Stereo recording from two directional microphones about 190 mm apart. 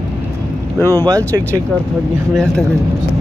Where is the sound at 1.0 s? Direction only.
20° right (ahead or behind).